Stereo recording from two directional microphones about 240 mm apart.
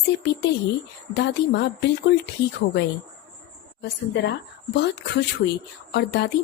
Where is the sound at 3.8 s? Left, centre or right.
Left.